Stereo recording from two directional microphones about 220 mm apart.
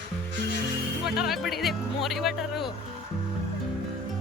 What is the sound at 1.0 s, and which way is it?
Speech, centre (ahead or behind).